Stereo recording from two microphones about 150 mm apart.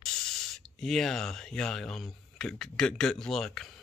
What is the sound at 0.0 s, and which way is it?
Speech, 5° left (ahead or behind).